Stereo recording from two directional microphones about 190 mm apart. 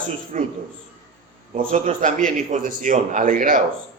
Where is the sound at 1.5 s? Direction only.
40° right (ahead or behind).